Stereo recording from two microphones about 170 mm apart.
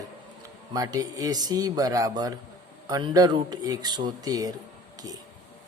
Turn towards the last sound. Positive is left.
turn(degrees=-20)  # may be behind; listen again after turning